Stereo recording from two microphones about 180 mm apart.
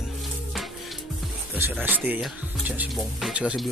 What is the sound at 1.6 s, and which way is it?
Speech, 10° right (ahead or behind).